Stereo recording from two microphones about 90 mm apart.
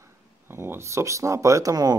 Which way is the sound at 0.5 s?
25° right (ahead or behind).